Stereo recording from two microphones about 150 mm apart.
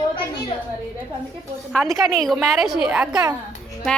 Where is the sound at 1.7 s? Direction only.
Centre (ahead or behind).